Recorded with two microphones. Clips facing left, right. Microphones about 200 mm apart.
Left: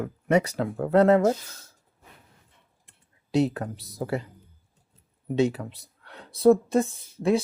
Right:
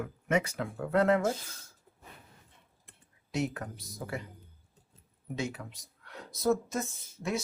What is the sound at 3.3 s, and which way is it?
Speech, 35° left (ahead or behind).